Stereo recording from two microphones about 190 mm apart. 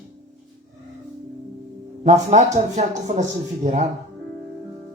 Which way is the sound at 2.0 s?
35° right (ahead or behind).